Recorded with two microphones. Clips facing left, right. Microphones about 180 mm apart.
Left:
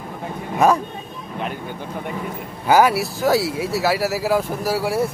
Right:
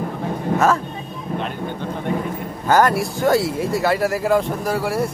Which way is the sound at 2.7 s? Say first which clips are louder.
Left 1 dB; 10° left (ahead or behind).